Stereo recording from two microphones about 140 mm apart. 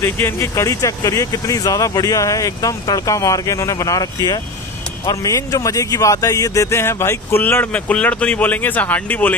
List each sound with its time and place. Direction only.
0.0 s speech: 20° left (ahead or behind)